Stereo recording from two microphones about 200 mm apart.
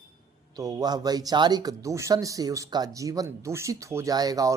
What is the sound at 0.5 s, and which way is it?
Speech, 20° right (ahead or behind).